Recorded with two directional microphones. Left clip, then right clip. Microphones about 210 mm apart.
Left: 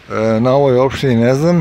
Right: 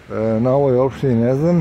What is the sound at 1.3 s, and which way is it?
Speech, 10° left (ahead or behind).